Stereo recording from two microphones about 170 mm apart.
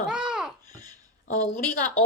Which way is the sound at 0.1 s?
5° right (ahead or behind).